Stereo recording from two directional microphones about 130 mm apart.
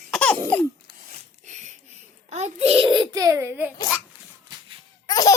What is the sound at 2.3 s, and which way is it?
A child's voice, 55° right (ahead or behind).